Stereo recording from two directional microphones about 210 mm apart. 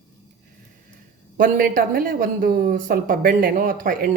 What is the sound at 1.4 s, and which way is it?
Speech, 40° right (ahead or behind).